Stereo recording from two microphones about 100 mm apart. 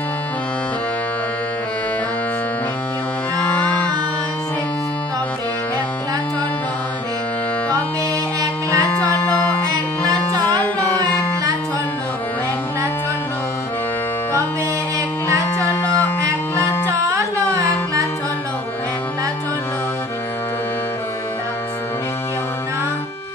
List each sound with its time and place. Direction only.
8.4 s music: 35° right (ahead or behind)
10.6 s music: 15° left (ahead or behind)
17.1 s carnatic music: 30° right (ahead or behind)